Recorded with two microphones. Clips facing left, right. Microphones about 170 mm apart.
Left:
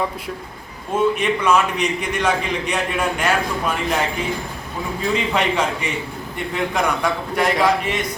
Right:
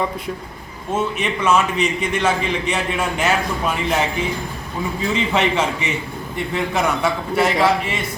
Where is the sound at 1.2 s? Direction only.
5° right (ahead or behind).